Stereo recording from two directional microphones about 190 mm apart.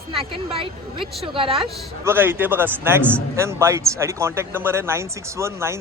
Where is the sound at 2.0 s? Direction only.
10° right (ahead or behind).